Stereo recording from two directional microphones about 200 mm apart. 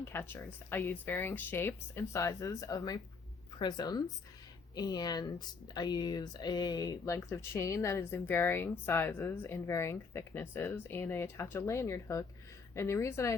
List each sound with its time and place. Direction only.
0.0 s speech: 10° left (ahead or behind)